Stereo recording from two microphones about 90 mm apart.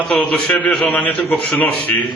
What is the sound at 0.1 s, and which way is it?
A man's voice, 10° left (ahead or behind).